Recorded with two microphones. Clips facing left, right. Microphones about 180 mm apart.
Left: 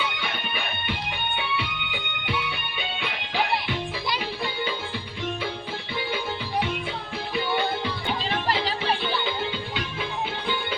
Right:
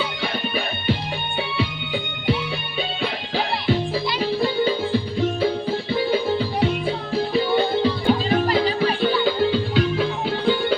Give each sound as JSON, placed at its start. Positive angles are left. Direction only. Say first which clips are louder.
{"t": 0.2, "sound": "music", "louder": "right 7 dB", "side_deg": -35}